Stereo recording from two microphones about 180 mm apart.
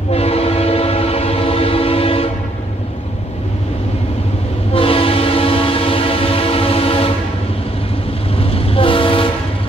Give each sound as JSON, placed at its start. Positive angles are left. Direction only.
{"t": 0.1, "sound": "train", "side_deg": 35}
{"t": 4.7, "sound": "train", "side_deg": 30}
{"t": 8.4, "sound": "train", "side_deg": 30}